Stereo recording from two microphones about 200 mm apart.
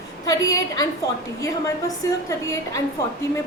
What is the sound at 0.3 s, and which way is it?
Speech, 15° left (ahead or behind).